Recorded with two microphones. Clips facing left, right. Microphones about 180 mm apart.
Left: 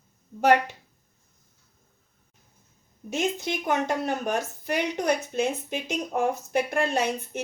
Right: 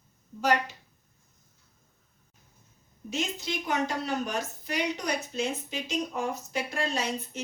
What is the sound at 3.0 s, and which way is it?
A woman's voice, 55° left (ahead or behind).